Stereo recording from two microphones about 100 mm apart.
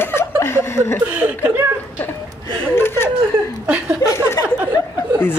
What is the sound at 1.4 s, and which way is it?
Speech, 25° right (ahead or behind).